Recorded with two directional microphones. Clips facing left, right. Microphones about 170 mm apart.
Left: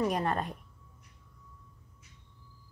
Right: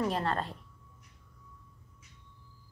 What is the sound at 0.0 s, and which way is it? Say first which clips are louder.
Speech: left 1 dB; 15° left (ahead or behind).